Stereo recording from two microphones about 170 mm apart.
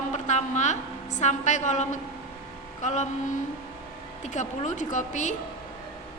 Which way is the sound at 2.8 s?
45° left (ahead or behind).